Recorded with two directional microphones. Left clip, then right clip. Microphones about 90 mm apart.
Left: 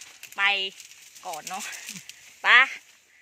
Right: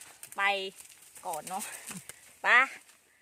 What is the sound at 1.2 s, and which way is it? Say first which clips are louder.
Speech: left 2 dB; 5° right (ahead or behind).